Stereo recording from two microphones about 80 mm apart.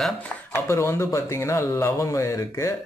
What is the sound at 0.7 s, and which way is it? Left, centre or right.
Speech, left.